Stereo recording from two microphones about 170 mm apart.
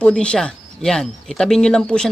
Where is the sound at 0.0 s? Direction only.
5° left (ahead or behind).